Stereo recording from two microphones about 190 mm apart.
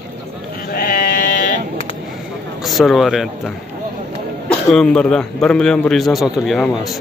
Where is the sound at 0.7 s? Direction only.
50° left (ahead or behind).